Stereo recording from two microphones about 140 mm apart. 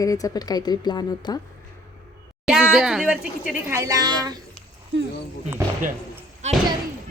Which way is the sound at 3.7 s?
20° right (ahead or behind).